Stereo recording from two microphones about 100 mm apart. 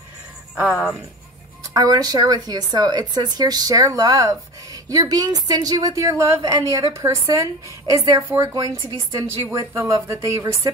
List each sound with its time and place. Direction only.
0.7 s speech: 10° right (ahead or behind)
1.7 s a woman's voice: 40° right (ahead or behind)